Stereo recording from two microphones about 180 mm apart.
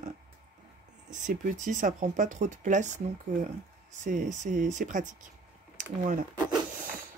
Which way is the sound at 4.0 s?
45° right (ahead or behind).